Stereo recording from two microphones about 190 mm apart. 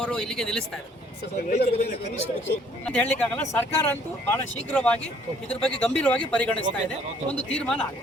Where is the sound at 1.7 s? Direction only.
35° left (ahead or behind).